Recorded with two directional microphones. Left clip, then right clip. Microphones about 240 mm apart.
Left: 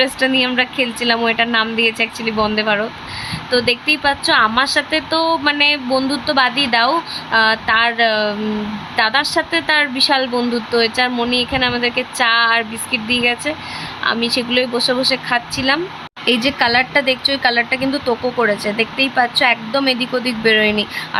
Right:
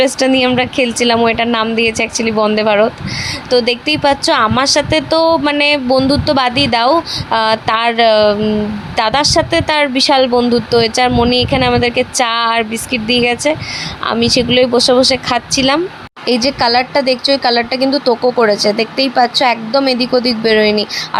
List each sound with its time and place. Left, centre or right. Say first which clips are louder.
0.0 s speech: right 4 dB; right